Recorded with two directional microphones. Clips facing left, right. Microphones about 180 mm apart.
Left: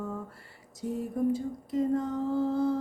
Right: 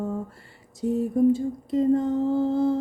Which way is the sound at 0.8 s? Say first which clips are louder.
Right 8 dB; 25° right (ahead or behind).